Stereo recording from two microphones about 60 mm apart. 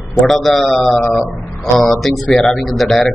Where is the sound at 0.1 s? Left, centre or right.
Centre.